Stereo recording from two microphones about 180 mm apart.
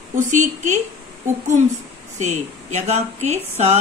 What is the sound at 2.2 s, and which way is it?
Speech, 40° right (ahead or behind).